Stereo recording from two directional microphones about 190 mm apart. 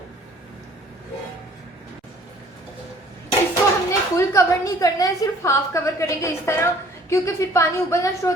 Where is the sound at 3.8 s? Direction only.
15° left (ahead or behind).